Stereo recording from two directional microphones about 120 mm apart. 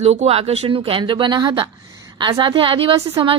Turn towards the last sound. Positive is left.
turn(degrees=-45)  # may be behind; listen again after turning